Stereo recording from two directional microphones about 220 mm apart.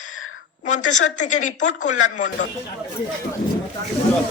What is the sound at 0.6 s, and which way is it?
A woman's voice, 35° left (ahead or behind).